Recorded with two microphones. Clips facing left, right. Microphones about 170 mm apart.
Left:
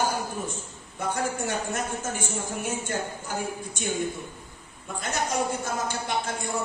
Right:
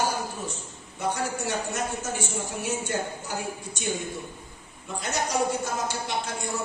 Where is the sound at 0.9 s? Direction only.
50° left (ahead or behind).